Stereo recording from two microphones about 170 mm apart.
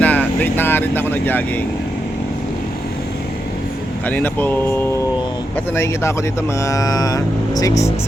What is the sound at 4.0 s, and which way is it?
Speech, 10° left (ahead or behind).